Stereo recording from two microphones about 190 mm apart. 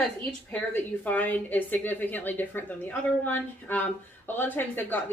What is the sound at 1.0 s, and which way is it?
A woman's voice, 10° left (ahead or behind).